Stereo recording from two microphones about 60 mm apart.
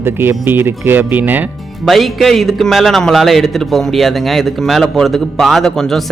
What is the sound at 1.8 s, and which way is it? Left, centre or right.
A man's voice, centre.